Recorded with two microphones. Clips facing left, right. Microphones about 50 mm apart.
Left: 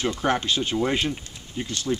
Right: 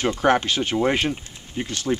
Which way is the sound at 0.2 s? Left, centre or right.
Right.